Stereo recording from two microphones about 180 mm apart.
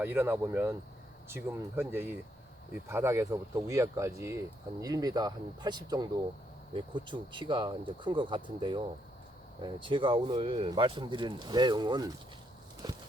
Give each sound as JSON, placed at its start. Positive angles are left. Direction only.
{"t": 0.0, "sound": "speech", "side_deg": -10}